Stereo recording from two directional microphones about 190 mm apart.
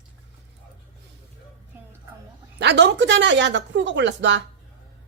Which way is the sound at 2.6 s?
65° right (ahead or behind).